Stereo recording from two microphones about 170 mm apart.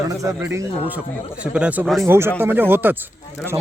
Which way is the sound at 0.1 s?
20° right (ahead or behind).